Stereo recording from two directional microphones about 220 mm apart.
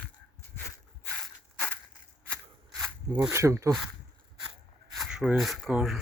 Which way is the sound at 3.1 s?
15° right (ahead or behind).